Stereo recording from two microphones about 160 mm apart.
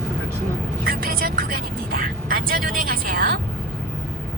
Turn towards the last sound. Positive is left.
turn(degrees=-65)  # may be behind; listen again after turning